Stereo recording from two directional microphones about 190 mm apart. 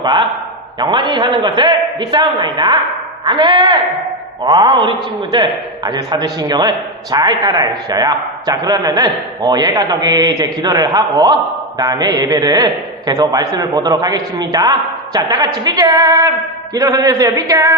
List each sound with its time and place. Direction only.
0.0 s a man's voice: 25° right (ahead or behind)